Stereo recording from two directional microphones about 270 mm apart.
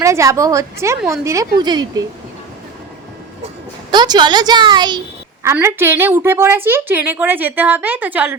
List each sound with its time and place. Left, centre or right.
0.0 s a woman's voice: centre
3.9 s a woman's voice: centre